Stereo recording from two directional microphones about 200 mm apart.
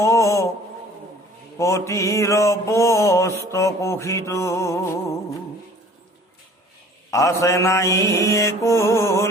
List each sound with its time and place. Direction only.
0.0 s mantra: 15° left (ahead or behind)
1.5 s mantra: 15° left (ahead or behind)
7.1 s mantra: 15° left (ahead or behind)